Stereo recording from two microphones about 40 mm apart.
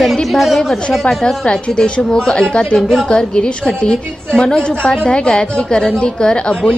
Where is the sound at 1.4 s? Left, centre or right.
Left.